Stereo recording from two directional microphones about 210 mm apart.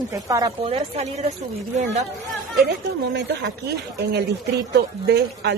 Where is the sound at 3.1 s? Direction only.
55° right (ahead or behind).